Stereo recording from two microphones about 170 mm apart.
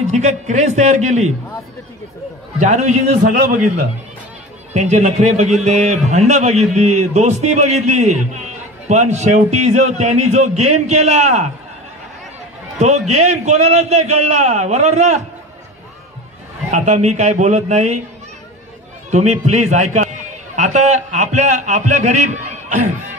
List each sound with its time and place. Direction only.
0.0 s a man's voice: 45° right (ahead or behind)
2.6 s a man's voice: 45° right (ahead or behind)
4.7 s a man's voice: 40° right (ahead or behind)
12.7 s a man's voice: 40° right (ahead or behind)
16.7 s a man's voice: 45° right (ahead or behind)
19.0 s a man's voice: 40° right (ahead or behind)